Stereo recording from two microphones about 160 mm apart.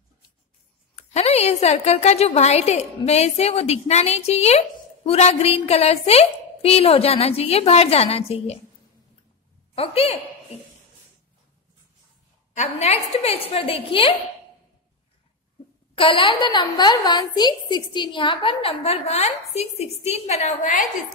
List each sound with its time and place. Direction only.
0.9 s a woman's voice: 40° left (ahead or behind)
9.8 s a woman's voice: 40° left (ahead or behind)
12.5 s a woman's voice: 45° left (ahead or behind)
15.9 s a woman's voice: 35° left (ahead or behind); by 20.9 s 50° left (ahead or behind)